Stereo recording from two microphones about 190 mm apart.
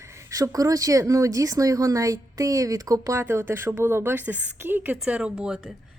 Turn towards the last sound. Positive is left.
turn(degrees=-5)  # may be behind; listen again after turning